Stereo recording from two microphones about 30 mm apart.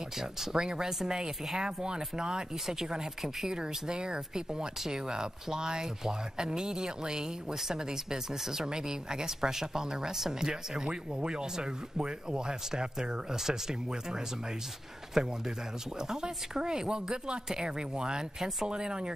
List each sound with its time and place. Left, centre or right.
0.2 s speech: centre
2.6 s speech: centre